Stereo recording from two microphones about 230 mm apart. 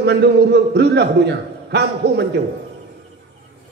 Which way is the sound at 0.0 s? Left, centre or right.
Right.